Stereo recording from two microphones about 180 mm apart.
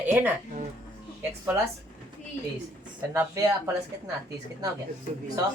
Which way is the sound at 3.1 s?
15° right (ahead or behind).